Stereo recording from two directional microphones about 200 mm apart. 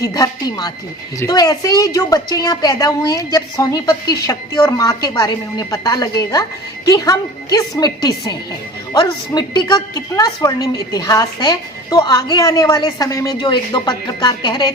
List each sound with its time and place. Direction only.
0.0 s a woman's voice: 15° left (ahead or behind)